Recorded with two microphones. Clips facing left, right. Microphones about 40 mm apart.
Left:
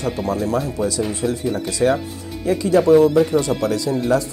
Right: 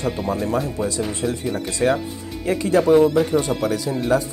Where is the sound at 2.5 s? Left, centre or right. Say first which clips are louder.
Left 2 dB; right.